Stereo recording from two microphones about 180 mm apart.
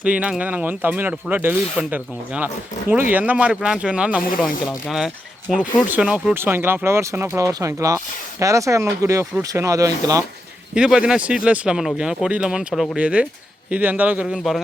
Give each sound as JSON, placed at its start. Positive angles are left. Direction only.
{"t": 0.0, "sound": "speech", "side_deg": -5}
{"t": 10.8, "sound": "speech", "side_deg": -5}